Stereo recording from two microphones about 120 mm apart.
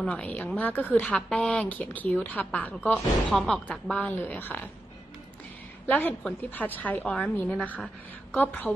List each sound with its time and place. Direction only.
0.0 s speech: 10° left (ahead or behind)
5.9 s speech: 15° left (ahead or behind)